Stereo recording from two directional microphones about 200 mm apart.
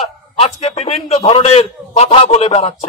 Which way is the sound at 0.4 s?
30° left (ahead or behind).